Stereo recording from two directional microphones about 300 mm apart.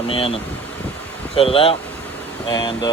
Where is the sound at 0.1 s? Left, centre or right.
Centre.